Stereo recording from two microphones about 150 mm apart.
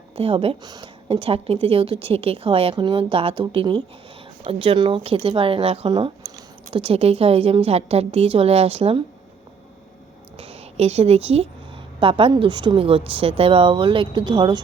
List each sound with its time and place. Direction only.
0.2 s speech: 40° right (ahead or behind)
1.1 s speech: 40° right (ahead or behind)
10.3 s a sound: 45° right (ahead or behind)
11.9 s speech: 35° right (ahead or behind)